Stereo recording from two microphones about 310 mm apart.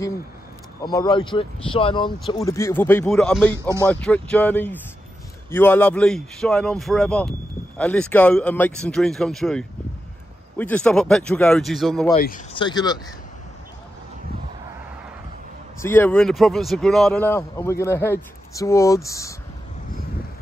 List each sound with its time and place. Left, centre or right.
0.8 s speech: centre
2.1 s speech: centre
3.6 s speech: centre
3.9 s speech: centre
12.1 s speech: left
12.5 s speech: centre
15.8 s speech: centre